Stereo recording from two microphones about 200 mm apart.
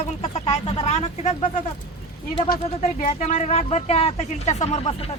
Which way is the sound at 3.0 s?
40° left (ahead or behind).